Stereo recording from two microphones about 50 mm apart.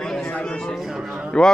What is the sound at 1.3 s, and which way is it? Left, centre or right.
Speech, centre.